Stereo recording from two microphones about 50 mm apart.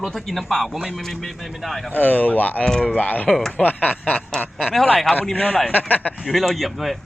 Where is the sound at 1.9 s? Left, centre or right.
Left.